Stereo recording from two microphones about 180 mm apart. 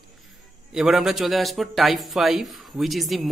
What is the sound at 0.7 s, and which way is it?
A man's voice, centre (ahead or behind).